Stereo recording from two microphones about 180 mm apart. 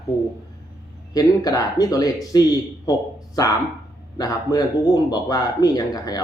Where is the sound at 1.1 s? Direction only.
20° left (ahead or behind).